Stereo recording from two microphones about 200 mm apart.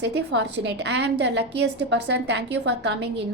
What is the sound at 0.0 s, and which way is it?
A woman's voice, 60° right (ahead or behind).